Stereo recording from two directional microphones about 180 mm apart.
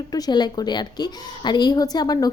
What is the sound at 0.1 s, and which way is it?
A woman's voice, 20° left (ahead or behind).